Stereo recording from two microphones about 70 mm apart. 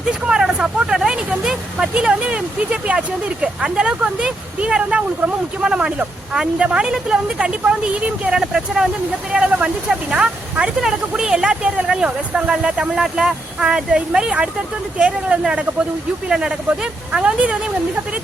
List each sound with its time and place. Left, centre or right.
0.1 s speech: centre